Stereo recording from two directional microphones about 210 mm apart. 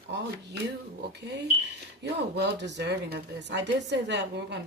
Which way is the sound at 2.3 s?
50° right (ahead or behind).